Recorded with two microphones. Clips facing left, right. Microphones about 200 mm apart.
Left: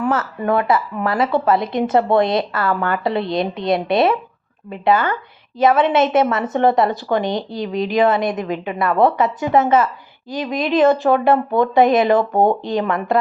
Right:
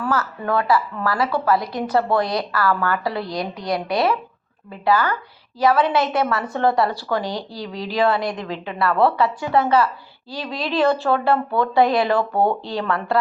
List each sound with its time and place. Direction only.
0.0 s a woman's voice: 25° left (ahead or behind)